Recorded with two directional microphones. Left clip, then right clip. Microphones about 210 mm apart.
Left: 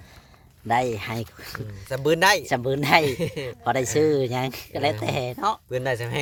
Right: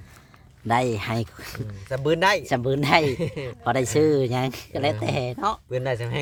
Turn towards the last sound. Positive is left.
turn(degrees=40)  # may be behind; listen again after turning